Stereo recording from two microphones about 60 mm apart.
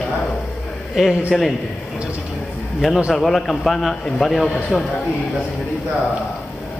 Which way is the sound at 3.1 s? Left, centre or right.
Centre.